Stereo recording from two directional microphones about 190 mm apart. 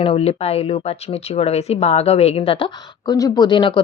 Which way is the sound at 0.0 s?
30° left (ahead or behind).